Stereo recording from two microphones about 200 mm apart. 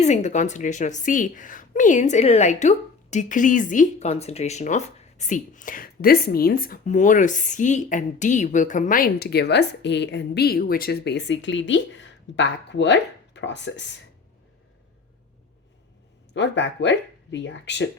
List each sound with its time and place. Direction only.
0.0 s a woman's voice: 35° left (ahead or behind); by 13.9 s 65° left (ahead or behind)
16.3 s speech: 65° left (ahead or behind)